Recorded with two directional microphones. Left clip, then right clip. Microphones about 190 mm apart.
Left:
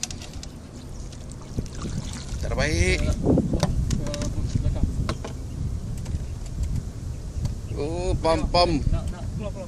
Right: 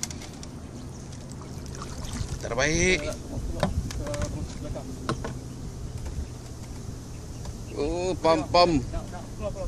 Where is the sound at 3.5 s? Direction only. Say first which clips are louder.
Left 2 dB; 15° left (ahead or behind).